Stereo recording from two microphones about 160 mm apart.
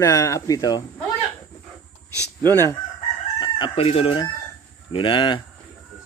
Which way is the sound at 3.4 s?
30° left (ahead or behind).